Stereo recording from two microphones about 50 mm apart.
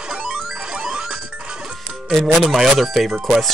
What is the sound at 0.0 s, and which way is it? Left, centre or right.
Music, centre.